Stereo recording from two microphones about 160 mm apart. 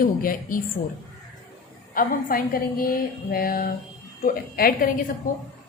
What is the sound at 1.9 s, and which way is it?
Speech, 60° left (ahead or behind).